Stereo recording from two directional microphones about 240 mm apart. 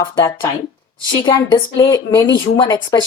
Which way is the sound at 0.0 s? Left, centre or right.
Centre.